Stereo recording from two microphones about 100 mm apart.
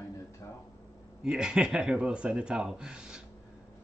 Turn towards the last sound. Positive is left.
turn(degrees=-10)  # may be behind; listen again after turning